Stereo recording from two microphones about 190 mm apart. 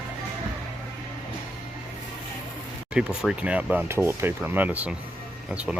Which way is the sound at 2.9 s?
5° right (ahead or behind).